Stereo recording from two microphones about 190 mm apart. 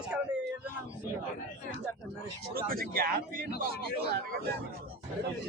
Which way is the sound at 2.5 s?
50° right (ahead or behind).